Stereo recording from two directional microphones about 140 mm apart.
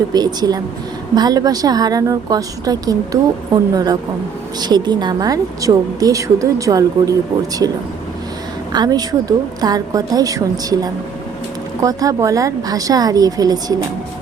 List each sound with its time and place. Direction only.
0.1 s a woman's voice: 30° right (ahead or behind)
8.7 s a woman's voice: 30° right (ahead or behind)